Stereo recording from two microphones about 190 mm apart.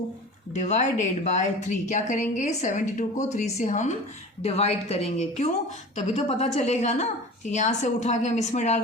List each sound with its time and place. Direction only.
0.5 s a woman's voice: 40° left (ahead or behind)